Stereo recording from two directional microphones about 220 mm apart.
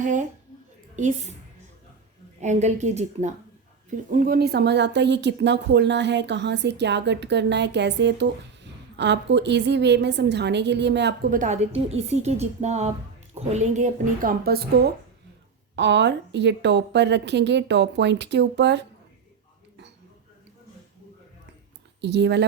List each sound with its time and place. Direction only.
0.0 s a woman's voice: 35° right (ahead or behind)
2.4 s a woman's voice: 30° right (ahead or behind); by 11.3 s 50° right (ahead or behind)
11.3 s a woman's voice: 35° right (ahead or behind); by 18.9 s 50° right (ahead or behind)
22.0 s a woman's voice: 50° right (ahead or behind)